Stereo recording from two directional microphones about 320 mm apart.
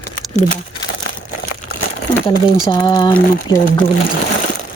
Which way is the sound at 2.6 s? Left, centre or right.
Centre.